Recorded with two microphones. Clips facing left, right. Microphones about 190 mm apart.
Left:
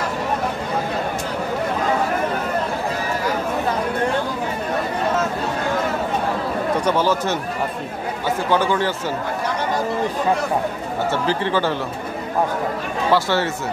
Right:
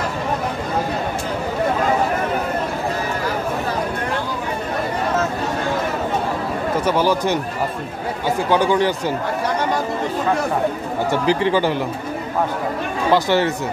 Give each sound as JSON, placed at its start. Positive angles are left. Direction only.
{"t": 6.8, "sound": "speech", "side_deg": -10}
{"t": 8.5, "sound": "speech", "side_deg": -15}
{"t": 11.1, "sound": "speech", "side_deg": -15}
{"t": 13.1, "sound": "speech", "side_deg": -15}